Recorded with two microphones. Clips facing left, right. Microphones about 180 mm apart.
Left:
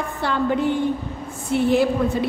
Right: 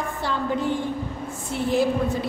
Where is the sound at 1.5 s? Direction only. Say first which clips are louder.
Left 8 dB; 65° left (ahead or behind).